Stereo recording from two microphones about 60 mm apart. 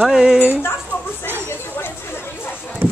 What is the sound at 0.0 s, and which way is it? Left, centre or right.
Speech, centre.